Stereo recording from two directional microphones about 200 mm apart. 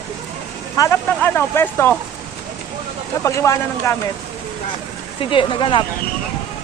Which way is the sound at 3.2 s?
15° left (ahead or behind).